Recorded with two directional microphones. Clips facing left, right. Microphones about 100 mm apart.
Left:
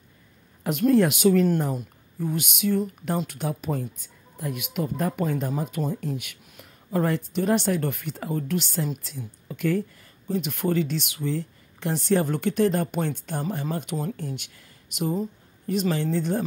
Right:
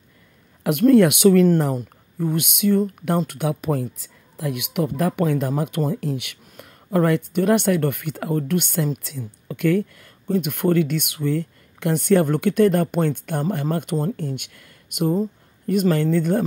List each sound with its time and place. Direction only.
0.7 s speech: 65° right (ahead or behind)
2.1 s speech: 60° right (ahead or behind)